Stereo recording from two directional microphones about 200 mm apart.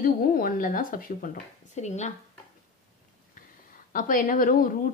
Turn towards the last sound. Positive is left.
turn(degrees=40)  # may be behind; listen again after turning